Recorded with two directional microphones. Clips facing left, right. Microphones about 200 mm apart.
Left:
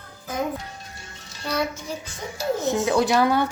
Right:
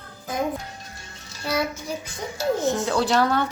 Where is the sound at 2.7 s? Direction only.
15° left (ahead or behind).